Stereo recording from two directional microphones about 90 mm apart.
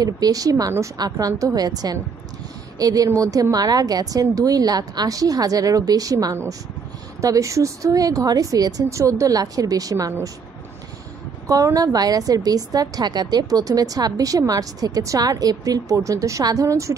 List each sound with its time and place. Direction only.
0.0 s a woman's voice: 45° right (ahead or behind)
11.4 s a woman's voice: 40° right (ahead or behind)